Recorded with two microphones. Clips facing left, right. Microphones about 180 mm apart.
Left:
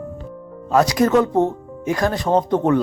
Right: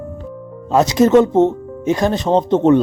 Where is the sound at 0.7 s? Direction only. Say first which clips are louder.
Right 3 dB; 25° right (ahead or behind).